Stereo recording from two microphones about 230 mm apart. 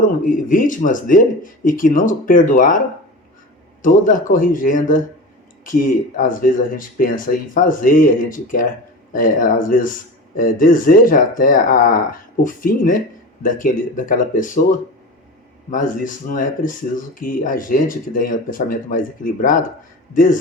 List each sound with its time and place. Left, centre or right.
0.2 s speech: left
3.8 s speech: left